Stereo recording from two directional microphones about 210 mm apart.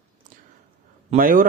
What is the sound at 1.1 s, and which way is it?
Speech, 40° right (ahead or behind).